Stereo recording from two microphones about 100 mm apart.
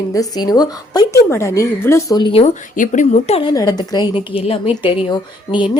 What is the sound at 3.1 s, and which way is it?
Speech, 90° left.